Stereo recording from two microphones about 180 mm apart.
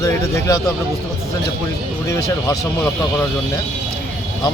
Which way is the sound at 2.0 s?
15° left (ahead or behind).